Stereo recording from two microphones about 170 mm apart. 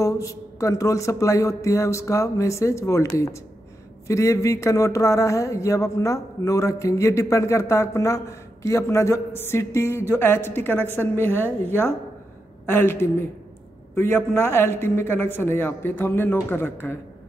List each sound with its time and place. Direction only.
0.0 s speech: 20° left (ahead or behind)